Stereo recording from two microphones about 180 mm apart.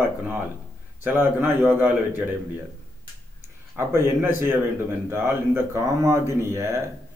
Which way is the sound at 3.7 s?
15° right (ahead or behind).